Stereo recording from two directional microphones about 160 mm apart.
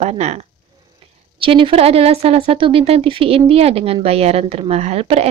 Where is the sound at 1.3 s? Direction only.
35° right (ahead or behind).